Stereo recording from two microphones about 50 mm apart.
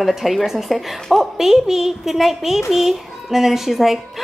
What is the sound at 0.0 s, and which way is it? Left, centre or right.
A woman's voice, centre.